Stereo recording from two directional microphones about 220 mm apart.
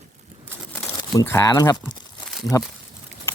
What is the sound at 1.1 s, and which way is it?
Speech, 10° left (ahead or behind).